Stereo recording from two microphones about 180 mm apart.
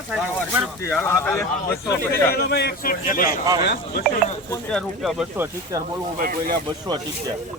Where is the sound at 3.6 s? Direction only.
65° left (ahead or behind).